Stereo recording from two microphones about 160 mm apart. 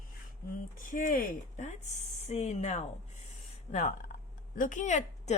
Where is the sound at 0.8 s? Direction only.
55° left (ahead or behind).